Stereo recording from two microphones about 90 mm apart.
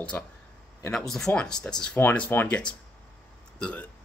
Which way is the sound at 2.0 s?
25° left (ahead or behind).